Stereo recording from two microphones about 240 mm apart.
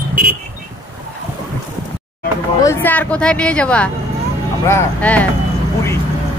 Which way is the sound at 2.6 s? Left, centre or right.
Centre.